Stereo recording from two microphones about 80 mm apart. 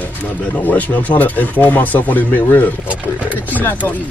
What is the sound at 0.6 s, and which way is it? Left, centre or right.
Speech, centre.